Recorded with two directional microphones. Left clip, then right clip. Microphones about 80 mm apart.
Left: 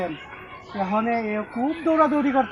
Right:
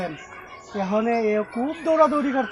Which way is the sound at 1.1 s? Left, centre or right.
Right.